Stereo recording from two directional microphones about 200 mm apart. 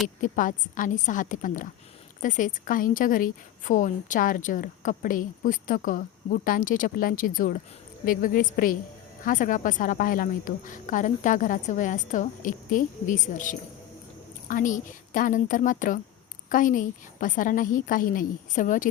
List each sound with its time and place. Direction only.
0.2 s a woman's voice: 40° left (ahead or behind)